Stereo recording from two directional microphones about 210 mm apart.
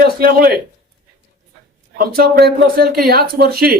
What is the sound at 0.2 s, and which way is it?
Speech, 45° right (ahead or behind).